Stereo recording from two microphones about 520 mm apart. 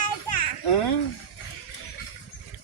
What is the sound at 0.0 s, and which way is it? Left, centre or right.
Children playing, left.